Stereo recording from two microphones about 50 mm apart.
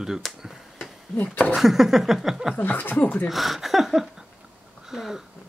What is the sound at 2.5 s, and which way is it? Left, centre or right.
Speech, left.